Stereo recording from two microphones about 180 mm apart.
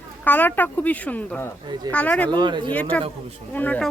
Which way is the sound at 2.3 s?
25° right (ahead or behind).